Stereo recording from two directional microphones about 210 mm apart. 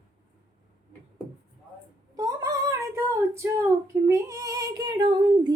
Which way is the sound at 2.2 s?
15° right (ahead or behind).